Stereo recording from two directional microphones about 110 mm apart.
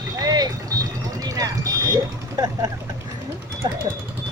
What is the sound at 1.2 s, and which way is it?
Vehicle, 35° right (ahead or behind).